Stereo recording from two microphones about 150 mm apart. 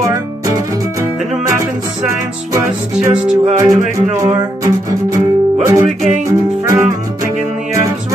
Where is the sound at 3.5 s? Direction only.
20° right (ahead or behind).